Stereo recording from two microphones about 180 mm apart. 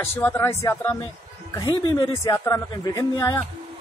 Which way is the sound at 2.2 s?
15° left (ahead or behind).